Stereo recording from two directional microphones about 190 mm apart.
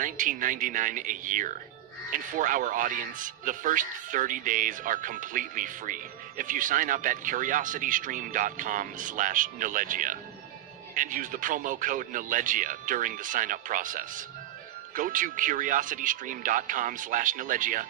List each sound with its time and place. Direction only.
0.0 s speech: 45° right (ahead or behind)